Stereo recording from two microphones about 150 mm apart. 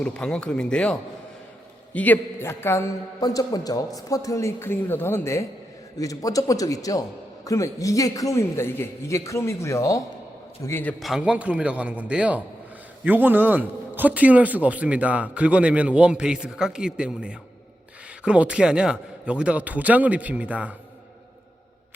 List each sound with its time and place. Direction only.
0.0 s a man's voice: 5° left (ahead or behind)
11.0 s a man's voice: 5° right (ahead or behind)